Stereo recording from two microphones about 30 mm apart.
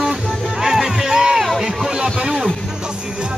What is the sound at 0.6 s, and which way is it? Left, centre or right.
Music, centre.